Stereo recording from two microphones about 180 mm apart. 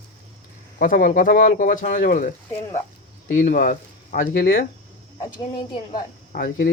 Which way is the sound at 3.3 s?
45° left (ahead or behind).